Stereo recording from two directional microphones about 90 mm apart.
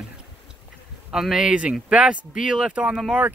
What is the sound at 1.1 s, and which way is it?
Speech, 5° right (ahead or behind).